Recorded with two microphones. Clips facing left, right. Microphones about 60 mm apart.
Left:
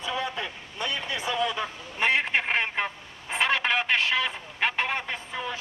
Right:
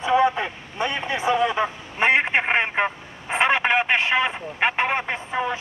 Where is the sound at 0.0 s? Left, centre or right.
Right.